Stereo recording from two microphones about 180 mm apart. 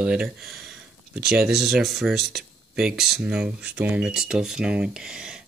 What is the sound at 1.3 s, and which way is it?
Speech, 5° right (ahead or behind).